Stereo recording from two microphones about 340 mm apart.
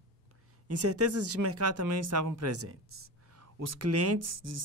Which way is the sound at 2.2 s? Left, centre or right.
Right.